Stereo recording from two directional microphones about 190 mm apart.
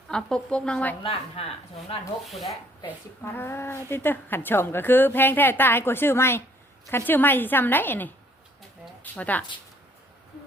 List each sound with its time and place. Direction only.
0.1 s speech: 5° left (ahead or behind)
1.0 s speech: 30° left (ahead or behind)
3.2 s a woman's voice: 15° left (ahead or behind)
9.1 s a woman's voice: 10° left (ahead or behind)